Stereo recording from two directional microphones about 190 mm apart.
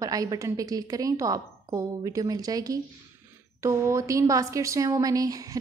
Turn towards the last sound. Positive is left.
turn(degrees=-20)  # may be behind; listen again after turning